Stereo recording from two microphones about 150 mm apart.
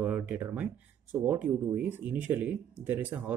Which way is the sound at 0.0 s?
15° right (ahead or behind).